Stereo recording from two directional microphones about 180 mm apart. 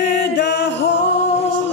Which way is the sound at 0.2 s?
75° left (ahead or behind).